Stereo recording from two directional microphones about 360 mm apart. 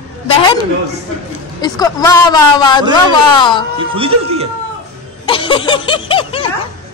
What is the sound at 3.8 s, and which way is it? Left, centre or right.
Speech, centre.